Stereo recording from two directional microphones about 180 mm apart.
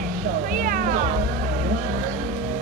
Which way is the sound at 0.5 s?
50° right (ahead or behind).